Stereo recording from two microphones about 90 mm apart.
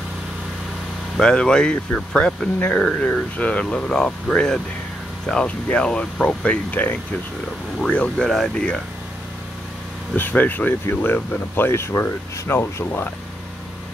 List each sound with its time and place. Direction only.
1.1 s speech: 10° left (ahead or behind)
10.1 s speech: 20° left (ahead or behind)